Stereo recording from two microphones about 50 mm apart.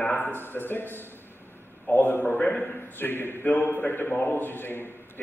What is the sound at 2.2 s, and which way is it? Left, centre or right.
Speech, left.